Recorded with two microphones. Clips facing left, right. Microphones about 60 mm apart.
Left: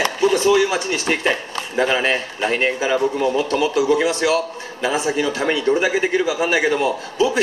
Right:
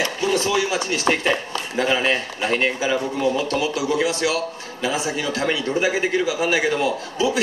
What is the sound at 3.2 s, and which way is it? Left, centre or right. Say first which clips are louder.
A man's voice: left 2 dB; left.